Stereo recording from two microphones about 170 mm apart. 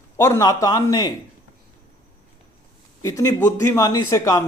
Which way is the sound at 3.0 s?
20° left (ahead or behind).